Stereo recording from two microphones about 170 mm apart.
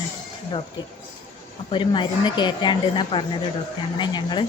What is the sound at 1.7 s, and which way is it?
A woman's voice, 30° left (ahead or behind).